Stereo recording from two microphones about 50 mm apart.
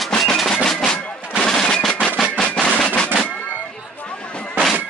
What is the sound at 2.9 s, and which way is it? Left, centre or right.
Music, left.